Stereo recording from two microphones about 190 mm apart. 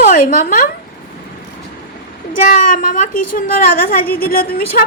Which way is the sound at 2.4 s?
45° left (ahead or behind).